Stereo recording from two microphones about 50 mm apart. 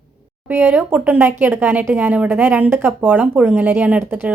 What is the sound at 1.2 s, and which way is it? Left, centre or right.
A woman's voice, right.